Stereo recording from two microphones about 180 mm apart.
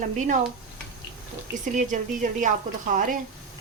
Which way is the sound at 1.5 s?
45° right (ahead or behind).